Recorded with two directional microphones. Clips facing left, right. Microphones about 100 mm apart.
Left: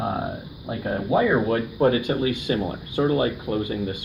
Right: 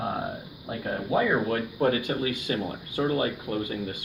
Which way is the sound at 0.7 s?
25° left (ahead or behind).